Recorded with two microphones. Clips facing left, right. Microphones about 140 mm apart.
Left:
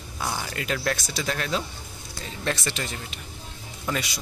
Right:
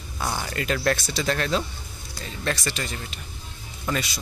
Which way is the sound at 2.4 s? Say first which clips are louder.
Right 1 dB; 20° left (ahead or behind).